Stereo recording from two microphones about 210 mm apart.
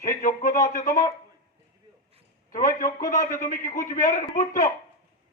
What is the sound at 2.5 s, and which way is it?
A man's voice, 40° left (ahead or behind).